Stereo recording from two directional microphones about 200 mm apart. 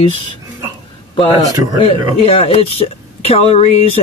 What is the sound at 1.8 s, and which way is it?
Speech, 30° left (ahead or behind).